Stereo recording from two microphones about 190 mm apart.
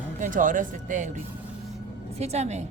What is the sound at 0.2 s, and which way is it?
A woman's voice, 45° right (ahead or behind).